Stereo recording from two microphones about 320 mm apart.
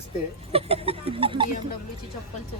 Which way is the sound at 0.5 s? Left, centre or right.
Centre.